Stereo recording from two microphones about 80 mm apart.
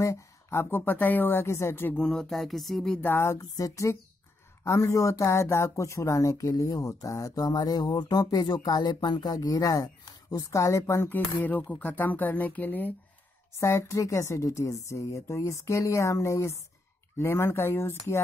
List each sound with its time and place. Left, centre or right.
0.0 s a woman's voice: left
2.0 s speech: centre
3.0 s a woman's voice: left
3.3 s a woman's voice: left
11.7 s a woman's voice: left
13.6 s a woman's voice: left